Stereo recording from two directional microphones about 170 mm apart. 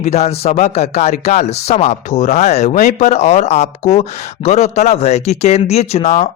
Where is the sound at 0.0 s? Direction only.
40° left (ahead or behind).